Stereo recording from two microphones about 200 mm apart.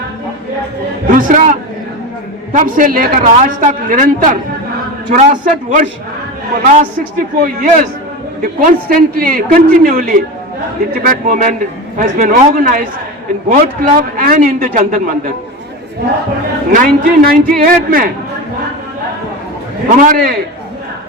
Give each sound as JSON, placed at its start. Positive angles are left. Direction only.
{"t": 1.0, "sound": "a man's voice", "side_deg": -40}
{"t": 16.7, "sound": "a man's voice", "side_deg": -45}
{"t": 20.0, "sound": "a man's voice", "side_deg": -45}